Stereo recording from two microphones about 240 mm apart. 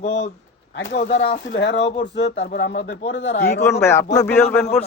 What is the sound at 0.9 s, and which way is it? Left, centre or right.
Speech, left.